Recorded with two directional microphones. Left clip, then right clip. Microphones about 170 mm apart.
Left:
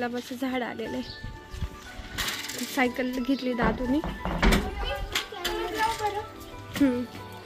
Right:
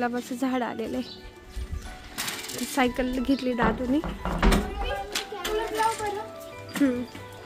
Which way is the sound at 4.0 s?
40° left (ahead or behind).